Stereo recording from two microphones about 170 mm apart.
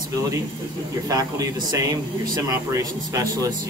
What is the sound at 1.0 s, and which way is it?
Speech, 20° right (ahead or behind).